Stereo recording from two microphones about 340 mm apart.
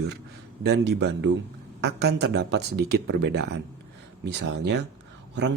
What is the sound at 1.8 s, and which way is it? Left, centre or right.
Speech, right.